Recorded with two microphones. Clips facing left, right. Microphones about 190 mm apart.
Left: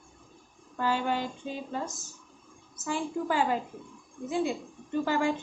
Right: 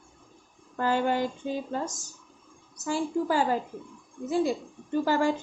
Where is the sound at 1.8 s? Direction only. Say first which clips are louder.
Right 3 dB; 90° right.